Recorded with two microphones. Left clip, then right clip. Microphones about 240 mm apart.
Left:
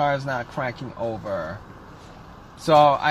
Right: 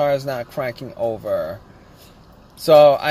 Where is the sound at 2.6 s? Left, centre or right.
Centre.